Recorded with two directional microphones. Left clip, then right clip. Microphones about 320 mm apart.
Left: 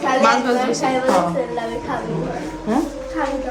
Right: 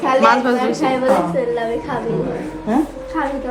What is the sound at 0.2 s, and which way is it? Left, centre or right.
Speech, centre.